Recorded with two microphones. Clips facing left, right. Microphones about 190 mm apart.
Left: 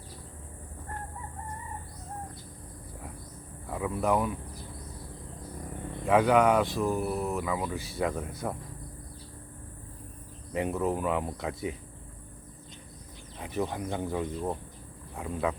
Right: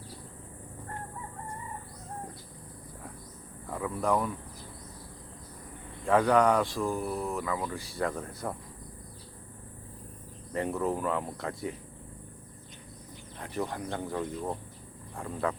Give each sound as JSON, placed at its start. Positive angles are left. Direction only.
{"t": 3.7, "sound": "speech", "side_deg": 10}
{"t": 6.1, "sound": "speech", "side_deg": 5}
{"t": 6.8, "sound": "speech", "side_deg": 20}
{"t": 8.3, "sound": "speech", "side_deg": 0}
{"t": 10.5, "sound": "speech", "side_deg": 15}
{"t": 13.4, "sound": "speech", "side_deg": 20}